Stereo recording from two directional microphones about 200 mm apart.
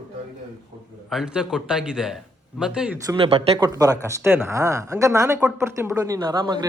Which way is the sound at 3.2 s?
25° right (ahead or behind).